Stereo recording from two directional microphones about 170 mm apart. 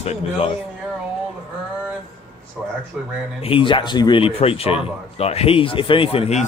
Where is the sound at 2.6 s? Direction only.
5° right (ahead or behind).